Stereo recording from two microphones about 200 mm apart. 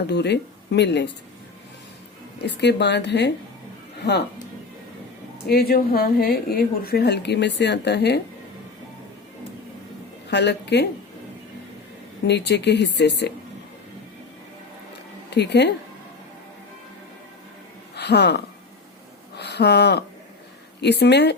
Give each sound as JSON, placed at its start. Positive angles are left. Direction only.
{"t": 0.1, "sound": "speech", "side_deg": 55}
{"t": 2.4, "sound": "speech", "side_deg": 60}
{"t": 5.5, "sound": "speech", "side_deg": 50}
{"t": 10.2, "sound": "speech", "side_deg": 60}
{"t": 12.3, "sound": "speech", "side_deg": 60}
{"t": 15.3, "sound": "speech", "side_deg": 60}
{"t": 17.9, "sound": "speech", "side_deg": 55}